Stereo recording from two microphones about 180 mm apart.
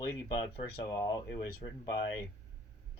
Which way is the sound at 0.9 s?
20° left (ahead or behind).